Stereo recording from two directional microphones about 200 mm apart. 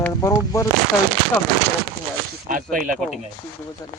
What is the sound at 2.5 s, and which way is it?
Speech, 40° right (ahead or behind).